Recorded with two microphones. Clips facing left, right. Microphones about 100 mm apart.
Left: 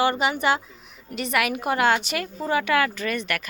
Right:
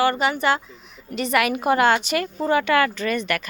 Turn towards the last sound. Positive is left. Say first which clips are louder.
# right 3 dB
turn(degrees=0)  # may be behind; listen again after turning